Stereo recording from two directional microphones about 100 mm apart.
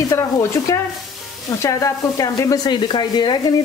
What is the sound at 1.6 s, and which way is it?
A woman's voice, 35° left (ahead or behind).